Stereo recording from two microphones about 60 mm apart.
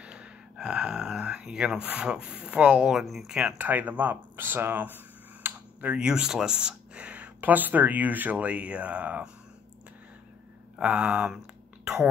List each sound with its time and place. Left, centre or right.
0.0 s a sound: centre
1.9 s speech: centre
5.9 s speech: centre
7.3 s speech: right
10.8 s speech: right
11.8 s a sound: centre